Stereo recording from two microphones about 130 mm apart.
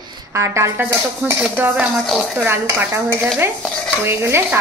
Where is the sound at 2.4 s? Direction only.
15° right (ahead or behind).